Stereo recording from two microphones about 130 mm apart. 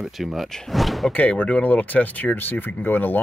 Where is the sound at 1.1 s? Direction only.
10° left (ahead or behind).